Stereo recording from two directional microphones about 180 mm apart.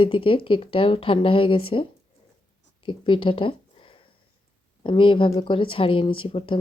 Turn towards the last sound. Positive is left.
turn(degrees=30)  # may be behind; listen again after turning